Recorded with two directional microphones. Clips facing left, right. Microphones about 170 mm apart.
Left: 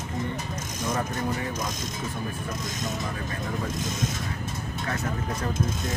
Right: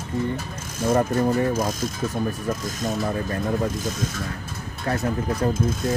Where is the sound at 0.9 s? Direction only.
35° right (ahead or behind).